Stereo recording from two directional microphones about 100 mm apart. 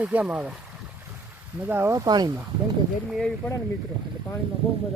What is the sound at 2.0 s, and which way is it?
Speech, 45° right (ahead or behind).